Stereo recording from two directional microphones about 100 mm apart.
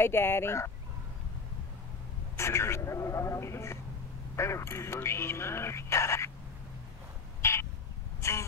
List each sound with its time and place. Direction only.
0.0 s speech: 25° left (ahead or behind)
2.3 s speech: 25° left (ahead or behind)
7.4 s a sound: 30° left (ahead or behind)